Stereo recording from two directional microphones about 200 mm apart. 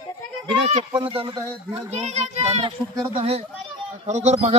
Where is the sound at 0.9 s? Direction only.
25° right (ahead or behind).